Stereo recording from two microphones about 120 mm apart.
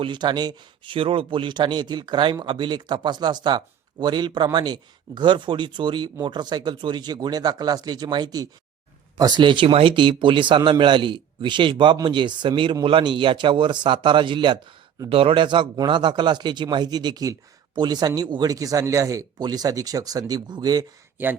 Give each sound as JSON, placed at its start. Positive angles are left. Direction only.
{"t": 0.0, "sound": "a man's voice", "side_deg": -40}
{"t": 15.1, "sound": "a man's voice", "side_deg": -50}